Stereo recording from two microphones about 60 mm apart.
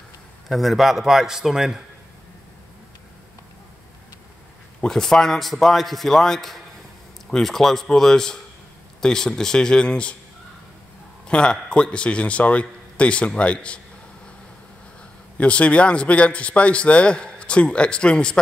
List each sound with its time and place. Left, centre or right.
0.5 s a man's voice: centre
4.7 s a man's voice: centre
11.2 s a man's voice: centre
15.3 s a man's voice: left